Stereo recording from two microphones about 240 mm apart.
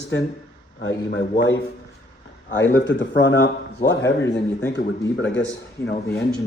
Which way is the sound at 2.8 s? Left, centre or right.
Left.